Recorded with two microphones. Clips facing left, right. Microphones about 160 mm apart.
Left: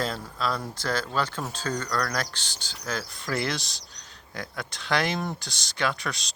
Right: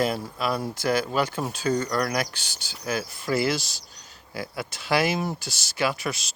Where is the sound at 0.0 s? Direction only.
10° right (ahead or behind).